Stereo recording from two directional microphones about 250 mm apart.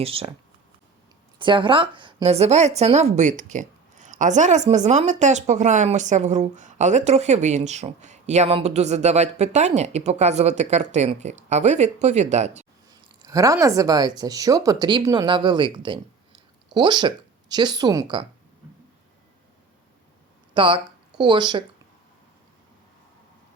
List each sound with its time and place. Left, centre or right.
0.0 s speech: right
1.4 s speech: centre
12.9 s speech: centre
20.5 s speech: right